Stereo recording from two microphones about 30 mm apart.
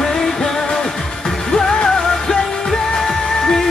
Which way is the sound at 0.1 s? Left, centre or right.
Left.